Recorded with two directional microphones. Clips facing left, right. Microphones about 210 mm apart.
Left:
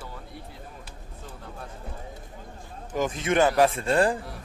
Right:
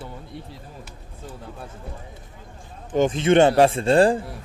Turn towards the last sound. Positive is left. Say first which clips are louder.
# right 6 dB
turn(degrees=-30)  # may be behind; listen again after turning